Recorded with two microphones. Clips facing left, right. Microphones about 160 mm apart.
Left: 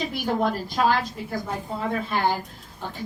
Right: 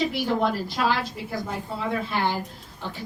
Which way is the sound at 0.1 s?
45° left (ahead or behind).